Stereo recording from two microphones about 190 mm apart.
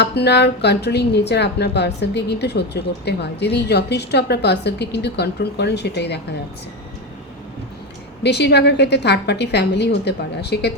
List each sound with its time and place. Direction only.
0.0 s speech: 60° left (ahead or behind)
8.2 s speech: 60° left (ahead or behind)